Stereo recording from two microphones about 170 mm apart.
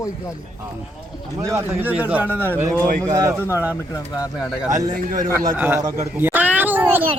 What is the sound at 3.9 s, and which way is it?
Speech, 20° left (ahead or behind).